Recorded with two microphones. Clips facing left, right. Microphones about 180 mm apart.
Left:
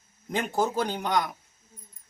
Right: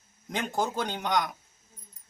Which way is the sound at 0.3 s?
5° left (ahead or behind).